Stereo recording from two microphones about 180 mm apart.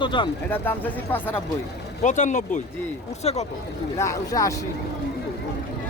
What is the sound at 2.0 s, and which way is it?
Speech, 45° left (ahead or behind).